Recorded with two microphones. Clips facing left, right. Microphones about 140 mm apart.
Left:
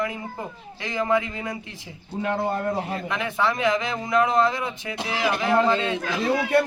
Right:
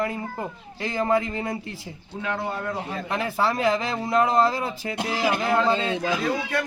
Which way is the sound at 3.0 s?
35° right (ahead or behind).